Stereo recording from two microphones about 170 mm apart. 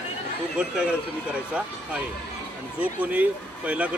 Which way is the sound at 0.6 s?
5° right (ahead or behind).